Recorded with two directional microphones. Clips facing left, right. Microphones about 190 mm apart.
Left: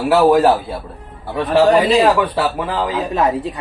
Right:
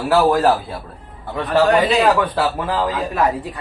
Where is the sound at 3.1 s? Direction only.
20° left (ahead or behind).